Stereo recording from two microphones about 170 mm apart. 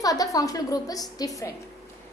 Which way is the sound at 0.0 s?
20° left (ahead or behind).